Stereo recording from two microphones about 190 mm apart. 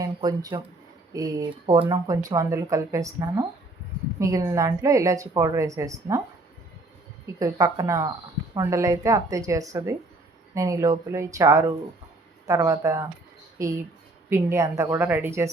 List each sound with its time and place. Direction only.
0.0 s speech: 20° right (ahead or behind)
7.3 s speech: 15° right (ahead or behind)